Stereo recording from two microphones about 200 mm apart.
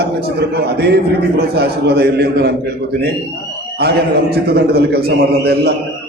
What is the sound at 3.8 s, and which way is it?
A man's voice, 50° right (ahead or behind).